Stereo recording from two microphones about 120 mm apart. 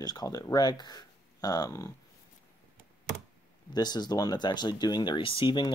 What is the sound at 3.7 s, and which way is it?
Speech, 35° left (ahead or behind).